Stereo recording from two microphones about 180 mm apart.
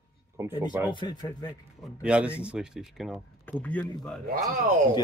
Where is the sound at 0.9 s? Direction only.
25° left (ahead or behind).